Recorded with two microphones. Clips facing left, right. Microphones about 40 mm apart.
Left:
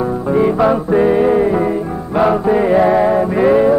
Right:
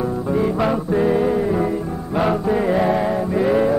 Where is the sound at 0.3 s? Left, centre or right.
Left.